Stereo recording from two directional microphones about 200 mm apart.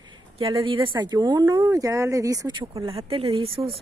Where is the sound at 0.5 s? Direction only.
25° right (ahead or behind).